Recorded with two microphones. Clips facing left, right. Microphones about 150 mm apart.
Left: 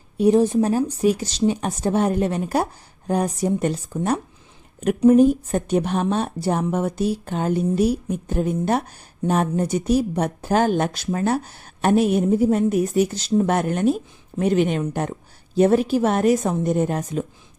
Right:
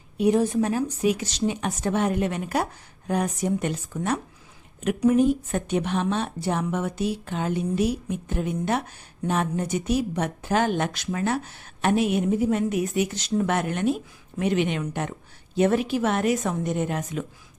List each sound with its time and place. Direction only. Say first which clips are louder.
0.2 s a woman's voice: left 4 dB; 30° left (ahead or behind)